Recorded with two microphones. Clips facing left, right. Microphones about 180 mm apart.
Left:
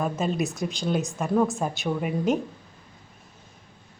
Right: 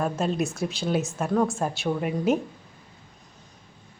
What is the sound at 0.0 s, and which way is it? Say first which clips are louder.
A woman's voice: even; centre (ahead or behind).